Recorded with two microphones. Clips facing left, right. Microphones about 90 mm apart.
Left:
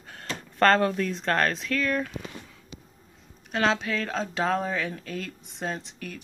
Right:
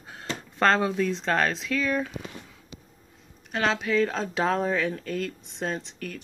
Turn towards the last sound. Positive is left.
turn(degrees=5)  # may be behind; listen again after turning